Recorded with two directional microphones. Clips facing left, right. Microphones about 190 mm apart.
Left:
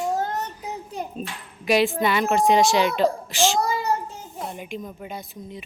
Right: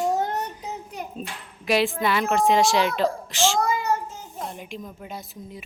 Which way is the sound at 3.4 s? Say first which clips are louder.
Left 1 dB; 15° left (ahead or behind).